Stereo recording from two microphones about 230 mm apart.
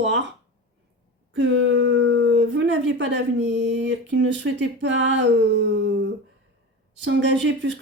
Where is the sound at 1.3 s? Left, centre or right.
Right.